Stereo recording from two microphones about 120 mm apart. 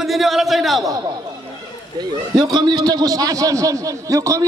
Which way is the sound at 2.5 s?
35° right (ahead or behind).